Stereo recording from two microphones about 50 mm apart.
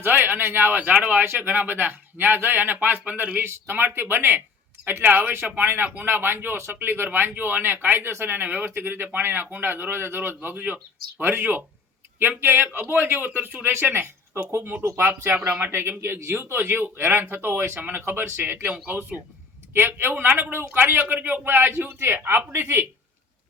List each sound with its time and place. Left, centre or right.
0.0 s a man's voice: right
3.4 s a man's voice: right
11.2 s a man's voice: right
20.0 s a man's voice: right
21.2 s a man's voice: right